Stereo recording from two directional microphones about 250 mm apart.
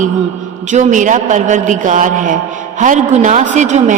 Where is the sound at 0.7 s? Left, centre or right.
Right.